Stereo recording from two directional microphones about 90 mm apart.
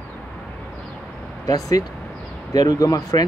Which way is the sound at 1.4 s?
40° left (ahead or behind).